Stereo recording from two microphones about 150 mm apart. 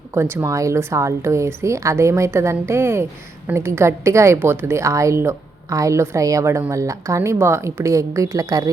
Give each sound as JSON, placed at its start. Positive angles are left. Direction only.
{"t": 0.1, "sound": "speech", "side_deg": -15}